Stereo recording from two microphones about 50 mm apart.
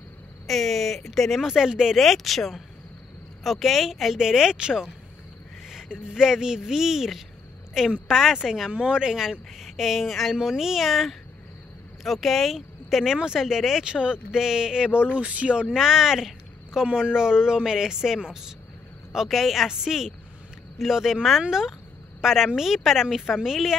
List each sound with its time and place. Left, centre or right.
0.5 s a woman's voice: centre
2.0 s a woman's voice: centre
10.3 s speech: centre
13.8 s a woman's voice: centre
15.7 s a woman's voice: centre
19.1 s a woman's voice: centre